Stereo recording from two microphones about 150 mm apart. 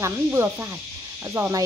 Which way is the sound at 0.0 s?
15° right (ahead or behind).